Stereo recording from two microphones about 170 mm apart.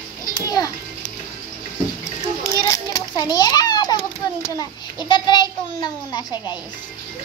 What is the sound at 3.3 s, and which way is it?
Children playing, 20° left (ahead or behind).